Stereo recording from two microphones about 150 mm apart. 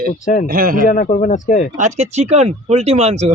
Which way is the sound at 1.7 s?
50° right (ahead or behind).